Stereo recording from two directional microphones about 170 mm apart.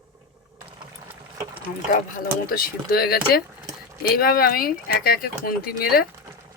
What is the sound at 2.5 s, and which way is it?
Speech, 60° left (ahead or behind).